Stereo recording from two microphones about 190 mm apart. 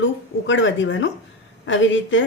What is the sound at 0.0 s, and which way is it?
A woman's voice, 75° left (ahead or behind).